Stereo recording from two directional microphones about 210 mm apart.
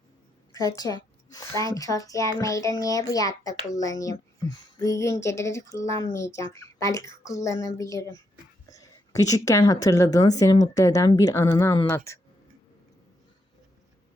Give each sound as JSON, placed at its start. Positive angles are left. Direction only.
{"t": 0.5, "sound": "a woman's voice", "side_deg": 15}